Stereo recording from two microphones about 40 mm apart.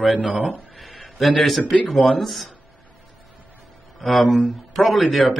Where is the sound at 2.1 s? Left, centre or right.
Centre.